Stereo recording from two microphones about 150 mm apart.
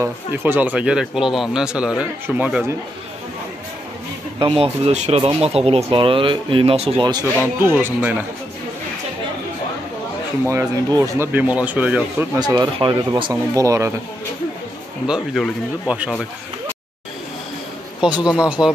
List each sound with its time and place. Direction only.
0.0 s speech: 15° right (ahead or behind)
4.4 s speech: 35° right (ahead or behind)
7.4 s speech: 15° right (ahead or behind)
10.4 s speech: 20° right (ahead or behind)
12.4 s speech: 30° right (ahead or behind)
15.0 s speech: centre (ahead or behind)
18.2 s speech: 5° right (ahead or behind)